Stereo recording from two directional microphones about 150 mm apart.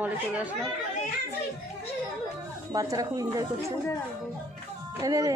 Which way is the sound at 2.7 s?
20° right (ahead or behind).